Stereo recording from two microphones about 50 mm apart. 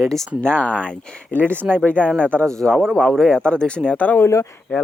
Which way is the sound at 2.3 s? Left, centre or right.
Left.